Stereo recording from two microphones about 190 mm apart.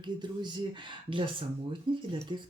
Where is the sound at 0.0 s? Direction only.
25° right (ahead or behind).